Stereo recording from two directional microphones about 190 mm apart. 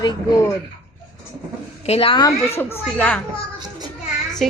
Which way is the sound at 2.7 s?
10° left (ahead or behind).